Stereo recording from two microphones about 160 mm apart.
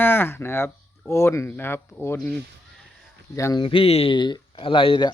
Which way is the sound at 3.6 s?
35° left (ahead or behind).